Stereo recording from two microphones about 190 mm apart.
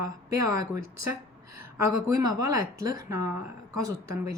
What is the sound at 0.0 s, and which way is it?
Speech, 20° right (ahead or behind).